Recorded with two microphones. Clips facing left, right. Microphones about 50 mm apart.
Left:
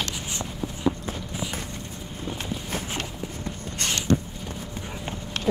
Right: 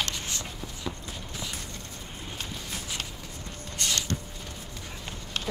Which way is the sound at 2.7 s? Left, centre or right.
Left.